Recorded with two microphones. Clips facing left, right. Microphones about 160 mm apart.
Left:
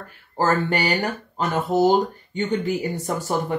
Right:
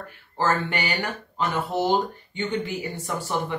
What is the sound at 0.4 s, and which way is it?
Speech, 40° left (ahead or behind).